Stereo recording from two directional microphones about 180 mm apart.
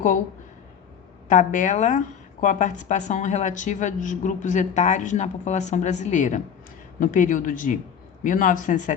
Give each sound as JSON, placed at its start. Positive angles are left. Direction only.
{"t": 1.3, "sound": "a woman's voice", "side_deg": 45}